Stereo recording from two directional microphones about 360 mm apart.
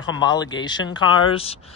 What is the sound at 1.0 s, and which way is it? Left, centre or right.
Speech, left.